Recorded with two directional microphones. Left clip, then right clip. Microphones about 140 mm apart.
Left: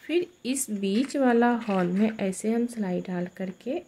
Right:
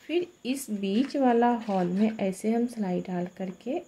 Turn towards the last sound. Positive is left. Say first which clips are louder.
# left 1 dB
turn(degrees=15)  # may be behind; listen again after turning